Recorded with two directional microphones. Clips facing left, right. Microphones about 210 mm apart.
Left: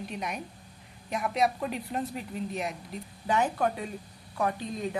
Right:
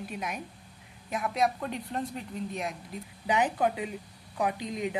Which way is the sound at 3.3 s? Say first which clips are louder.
Even; 15° right (ahead or behind).